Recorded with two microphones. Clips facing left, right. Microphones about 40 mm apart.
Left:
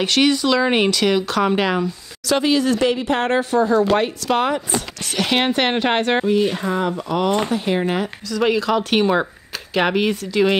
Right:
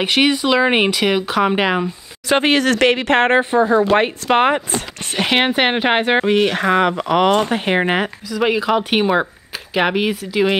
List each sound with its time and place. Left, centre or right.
0.0 s speech: right
2.3 s speech: right
3.3 s speech: right
6.2 s speech: right
7.4 s speech: right
8.3 s speech: centre